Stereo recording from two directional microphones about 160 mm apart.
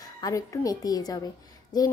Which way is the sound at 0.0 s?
20° left (ahead or behind).